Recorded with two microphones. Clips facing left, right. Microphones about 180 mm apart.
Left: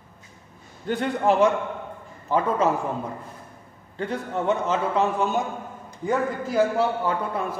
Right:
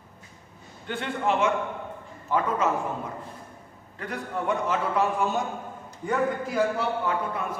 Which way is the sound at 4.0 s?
25° left (ahead or behind).